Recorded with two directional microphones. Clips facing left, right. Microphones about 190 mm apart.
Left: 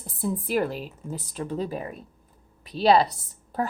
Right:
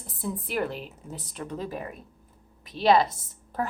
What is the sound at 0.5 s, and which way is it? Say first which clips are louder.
A woman's voice: left 2 dB; 35° left (ahead or behind).